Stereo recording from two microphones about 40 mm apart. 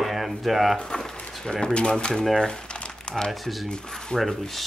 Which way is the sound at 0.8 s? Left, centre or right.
Centre.